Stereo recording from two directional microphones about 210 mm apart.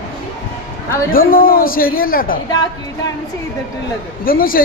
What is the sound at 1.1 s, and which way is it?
A man's voice, 45° left (ahead or behind).